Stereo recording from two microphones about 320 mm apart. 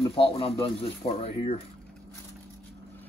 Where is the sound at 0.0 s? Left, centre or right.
Centre.